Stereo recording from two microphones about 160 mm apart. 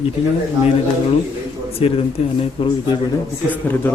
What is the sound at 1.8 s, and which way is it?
Speech, 35° left (ahead or behind).